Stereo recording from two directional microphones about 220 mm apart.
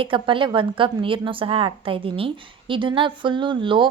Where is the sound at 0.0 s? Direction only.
25° right (ahead or behind).